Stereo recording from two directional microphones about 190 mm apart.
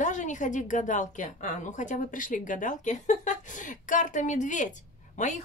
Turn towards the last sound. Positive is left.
turn(degrees=40)  # may be behind; listen again after turning